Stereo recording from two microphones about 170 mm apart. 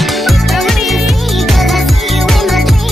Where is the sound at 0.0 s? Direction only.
Centre (ahead or behind).